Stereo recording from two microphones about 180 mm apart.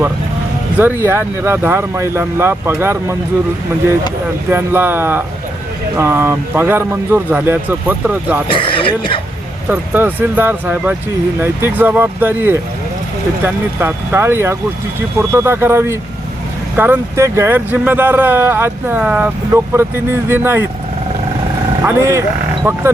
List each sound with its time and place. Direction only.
0.8 s speech: 10° right (ahead or behind)
4.4 s speech: 10° right (ahead or behind)
8.4 s speech: 30° left (ahead or behind)
9.6 s speech: 10° right (ahead or behind)
21.8 s speech: 15° right (ahead or behind)